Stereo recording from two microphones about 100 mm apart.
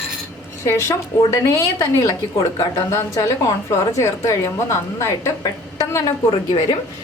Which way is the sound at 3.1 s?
35° left (ahead or behind).